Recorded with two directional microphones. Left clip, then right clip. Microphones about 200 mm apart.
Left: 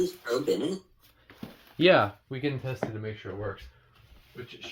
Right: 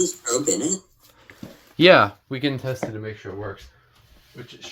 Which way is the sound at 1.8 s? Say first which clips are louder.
Right 8 dB; 35° right (ahead or behind).